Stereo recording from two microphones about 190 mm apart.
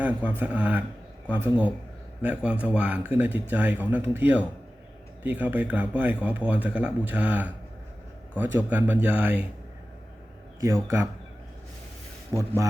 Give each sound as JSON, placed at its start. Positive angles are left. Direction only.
{"t": 0.0, "sound": "speech", "side_deg": -5}
{"t": 10.8, "sound": "speech", "side_deg": -15}
{"t": 12.3, "sound": "speech", "side_deg": -15}